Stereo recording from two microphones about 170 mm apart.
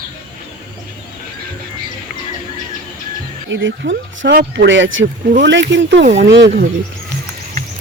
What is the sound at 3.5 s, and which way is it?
Speech, 90° right.